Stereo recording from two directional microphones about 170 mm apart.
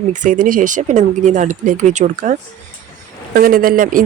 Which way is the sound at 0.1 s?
50° right (ahead or behind).